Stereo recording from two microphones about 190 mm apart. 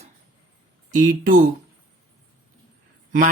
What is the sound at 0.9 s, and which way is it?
Speech, 45° right (ahead or behind).